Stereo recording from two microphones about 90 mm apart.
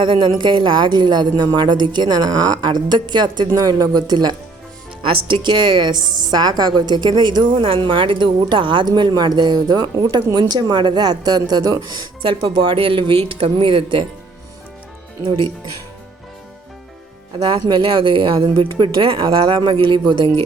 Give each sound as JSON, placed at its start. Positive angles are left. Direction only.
{"t": 0.0, "sound": "speech", "side_deg": -65}
{"t": 5.0, "sound": "speech", "side_deg": -60}
{"t": 7.6, "sound": "speech", "side_deg": -70}
{"t": 12.2, "sound": "speech", "side_deg": -75}
{"t": 15.2, "sound": "speech", "side_deg": -65}
{"t": 17.3, "sound": "speech", "side_deg": -65}